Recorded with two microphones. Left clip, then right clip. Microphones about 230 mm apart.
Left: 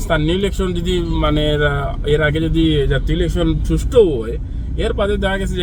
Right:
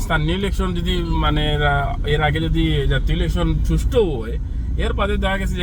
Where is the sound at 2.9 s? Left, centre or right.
Right.